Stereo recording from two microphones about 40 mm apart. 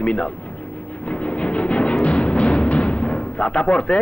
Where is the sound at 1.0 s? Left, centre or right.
Left.